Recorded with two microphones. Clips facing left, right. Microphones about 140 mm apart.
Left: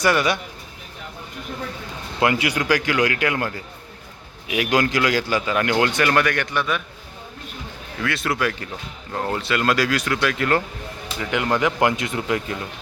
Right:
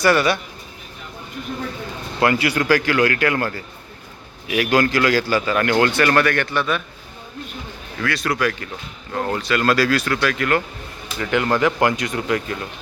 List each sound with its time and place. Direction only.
0.0 s a man's voice: 15° left (ahead or behind)
2.2 s a man's voice: 15° left (ahead or behind)
8.0 s speech: 25° left (ahead or behind)
11.2 s a man's voice: 15° left (ahead or behind)